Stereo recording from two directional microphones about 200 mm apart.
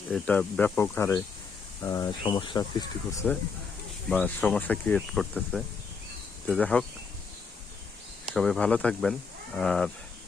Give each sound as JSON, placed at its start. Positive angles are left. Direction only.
{"t": 0.1, "sound": "speech", "side_deg": 5}
{"t": 4.1, "sound": "speech", "side_deg": 5}
{"t": 8.4, "sound": "speech", "side_deg": 5}